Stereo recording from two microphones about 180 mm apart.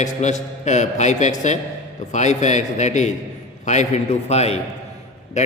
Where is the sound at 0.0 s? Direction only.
40° left (ahead or behind).